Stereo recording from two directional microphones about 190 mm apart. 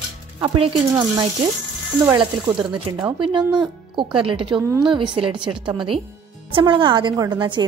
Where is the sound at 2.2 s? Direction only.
25° right (ahead or behind).